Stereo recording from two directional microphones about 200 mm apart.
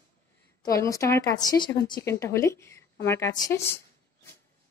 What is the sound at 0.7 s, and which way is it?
Speech, 15° left (ahead or behind).